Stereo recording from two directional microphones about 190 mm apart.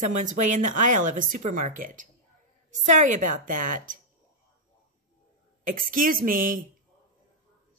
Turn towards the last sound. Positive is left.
turn(degrees=-45)  # may be behind; listen again after turning